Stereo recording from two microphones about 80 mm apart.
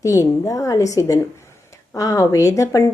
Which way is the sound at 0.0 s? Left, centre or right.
Left.